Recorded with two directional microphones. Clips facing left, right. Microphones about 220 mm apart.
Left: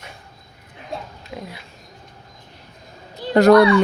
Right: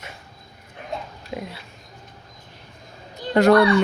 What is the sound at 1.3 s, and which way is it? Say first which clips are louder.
Speech: right 2 dB; 25° right (ahead or behind).